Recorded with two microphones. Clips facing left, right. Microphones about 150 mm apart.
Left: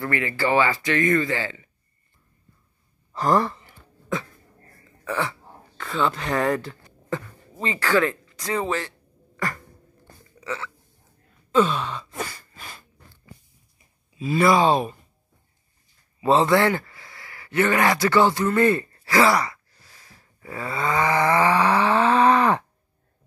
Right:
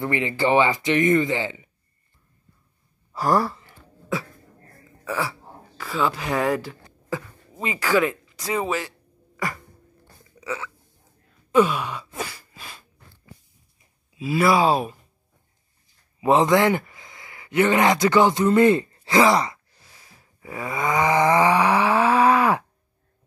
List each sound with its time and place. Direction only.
0.0 s speech: 20° right (ahead or behind)
3.1 s speech: 10° right (ahead or behind)
5.0 s speech: 5° right (ahead or behind)
10.4 s speech: 15° right (ahead or behind)
11.5 s gasp: 10° right (ahead or behind)
14.1 s speech: 5° right (ahead or behind)
16.2 s a man's voice: 15° right (ahead or behind)
20.2 s a sound: 15° right (ahead or behind)